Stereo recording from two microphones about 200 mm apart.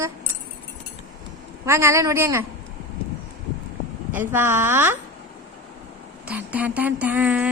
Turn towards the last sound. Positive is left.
turn(degrees=-5)  # may be behind; listen again after turning